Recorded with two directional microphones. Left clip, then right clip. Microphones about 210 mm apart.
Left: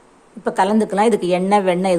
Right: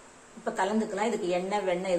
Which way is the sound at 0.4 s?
50° left (ahead or behind).